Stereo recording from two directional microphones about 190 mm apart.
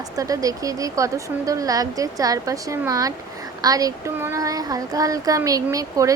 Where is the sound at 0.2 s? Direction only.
20° right (ahead or behind).